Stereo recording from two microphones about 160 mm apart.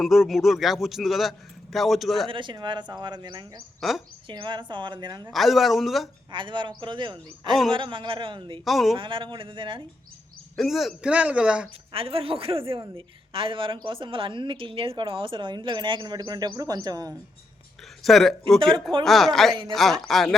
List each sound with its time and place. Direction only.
0.0 s a man's voice: centre (ahead or behind)
2.3 s a man's voice: 30° right (ahead or behind)
3.8 s a man's voice: centre (ahead or behind)
4.3 s a man's voice: 30° right (ahead or behind)
5.3 s a man's voice: centre (ahead or behind)
6.3 s a man's voice: 30° right (ahead or behind)
8.6 s a man's voice: centre (ahead or behind)
9.0 s a woman's voice: 30° right (ahead or behind)
10.6 s speech: centre (ahead or behind)
11.9 s a woman's voice: 35° right (ahead or behind)
18.0 s a man's voice: centre (ahead or behind)